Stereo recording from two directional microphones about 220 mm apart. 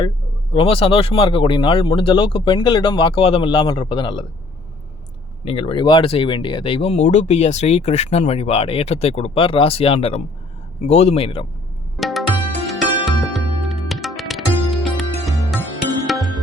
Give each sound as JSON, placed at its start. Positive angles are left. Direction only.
{"t": 0.5, "sound": "speech", "side_deg": 25}
{"t": 5.5, "sound": "speech", "side_deg": 25}
{"t": 11.9, "sound": "music", "side_deg": 0}